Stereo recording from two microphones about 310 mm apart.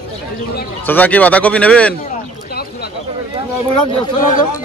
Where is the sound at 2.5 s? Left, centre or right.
Left.